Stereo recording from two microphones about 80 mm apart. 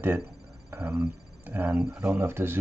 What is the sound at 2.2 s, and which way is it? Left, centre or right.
Speech, right.